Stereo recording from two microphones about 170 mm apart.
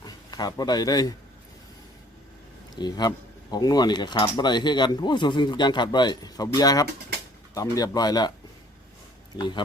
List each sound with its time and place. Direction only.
0.0 s speech: 25° left (ahead or behind)
2.7 s speech: 25° left (ahead or behind)